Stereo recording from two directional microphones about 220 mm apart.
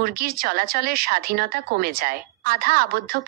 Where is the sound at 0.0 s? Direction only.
45° right (ahead or behind).